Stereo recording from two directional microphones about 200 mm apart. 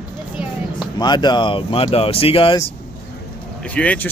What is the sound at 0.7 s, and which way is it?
Speech, 20° left (ahead or behind).